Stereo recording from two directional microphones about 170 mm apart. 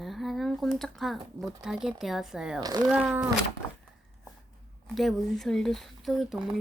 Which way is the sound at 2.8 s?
Centre (ahead or behind).